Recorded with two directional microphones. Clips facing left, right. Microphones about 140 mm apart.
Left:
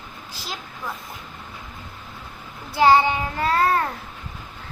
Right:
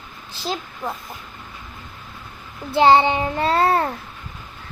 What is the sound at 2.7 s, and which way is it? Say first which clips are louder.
Child singing: right 2 dB; 25° right (ahead or behind).